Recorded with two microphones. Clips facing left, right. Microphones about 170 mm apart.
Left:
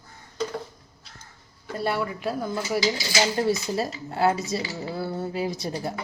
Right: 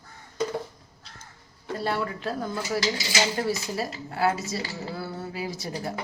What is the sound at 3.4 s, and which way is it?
Speech, 25° left (ahead or behind).